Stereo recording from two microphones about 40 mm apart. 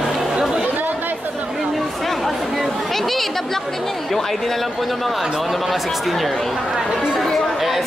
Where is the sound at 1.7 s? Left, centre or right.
Centre.